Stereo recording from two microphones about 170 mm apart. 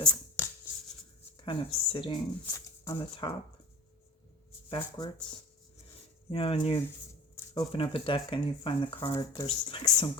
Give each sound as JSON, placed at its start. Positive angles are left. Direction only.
{"t": 0.0, "sound": "chopping", "side_deg": 5}
{"t": 1.5, "sound": "speech", "side_deg": 30}
{"t": 2.5, "sound": "speech", "side_deg": 20}
{"t": 4.7, "sound": "speech", "side_deg": 25}
{"t": 6.3, "sound": "speech", "side_deg": 35}
{"t": 7.3, "sound": "speech", "side_deg": 25}